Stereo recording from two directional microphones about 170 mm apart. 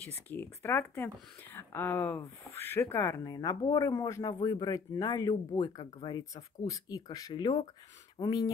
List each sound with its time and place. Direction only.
0.3 s speech: 10° left (ahead or behind)